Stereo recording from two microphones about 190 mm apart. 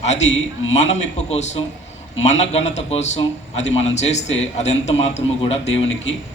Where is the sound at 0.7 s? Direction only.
35° left (ahead or behind).